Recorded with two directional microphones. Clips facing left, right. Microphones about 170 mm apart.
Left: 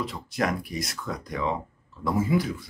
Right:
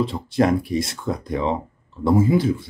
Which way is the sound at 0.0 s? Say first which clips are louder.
Right 9 dB; 30° right (ahead or behind).